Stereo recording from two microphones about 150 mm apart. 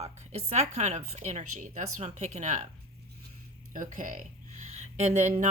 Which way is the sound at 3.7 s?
60° right (ahead or behind).